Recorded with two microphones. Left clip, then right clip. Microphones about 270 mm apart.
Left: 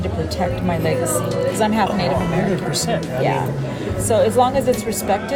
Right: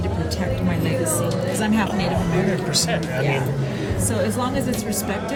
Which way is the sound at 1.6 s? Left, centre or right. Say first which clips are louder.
Left 5 dB; left.